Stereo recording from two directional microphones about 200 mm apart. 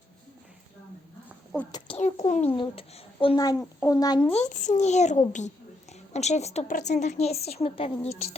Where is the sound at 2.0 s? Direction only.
35° left (ahead or behind); by 3.6 s 20° left (ahead or behind).